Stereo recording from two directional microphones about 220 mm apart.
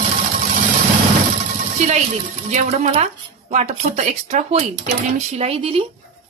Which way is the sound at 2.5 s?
30° right (ahead or behind).